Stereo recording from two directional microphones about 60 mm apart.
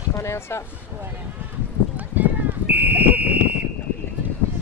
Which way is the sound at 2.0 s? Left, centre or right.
Right.